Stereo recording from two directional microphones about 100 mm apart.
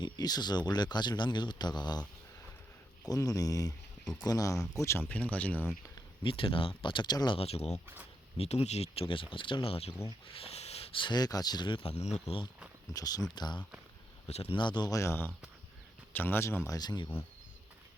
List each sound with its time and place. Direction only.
0.0 s a man's voice: 40° left (ahead or behind)
3.1 s speech: 35° left (ahead or behind)
5.0 s speech: 15° left (ahead or behind)
6.2 s speech: 60° left (ahead or behind)
7.3 s speech: 90° left; by 9.9 s 70° left (ahead or behind)
10.2 s a sound: 75° left (ahead or behind); by 11.0 s 90° left
11.0 s a man's voice: 45° left (ahead or behind); by 12.0 s 70° left (ahead or behind)
12.3 s speech: 90° left
12.9 s a man's voice: 35° left (ahead or behind)
14.9 s speech: 25° left (ahead or behind)
16.7 s a man's voice: 45° left (ahead or behind)